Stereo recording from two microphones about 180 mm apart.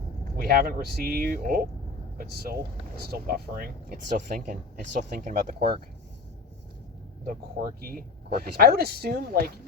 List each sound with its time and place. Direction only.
0.3 s speech: 55° right (ahead or behind)
7.8 s speech: 55° right (ahead or behind)